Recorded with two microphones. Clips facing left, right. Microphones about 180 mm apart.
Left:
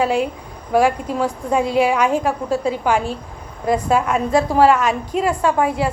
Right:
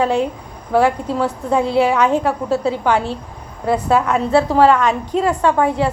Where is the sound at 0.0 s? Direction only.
10° left (ahead or behind).